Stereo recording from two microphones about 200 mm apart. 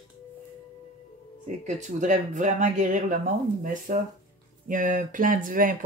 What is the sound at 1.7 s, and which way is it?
Speech, 35° right (ahead or behind).